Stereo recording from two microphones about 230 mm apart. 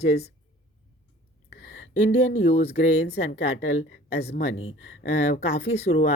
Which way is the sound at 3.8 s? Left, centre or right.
Left.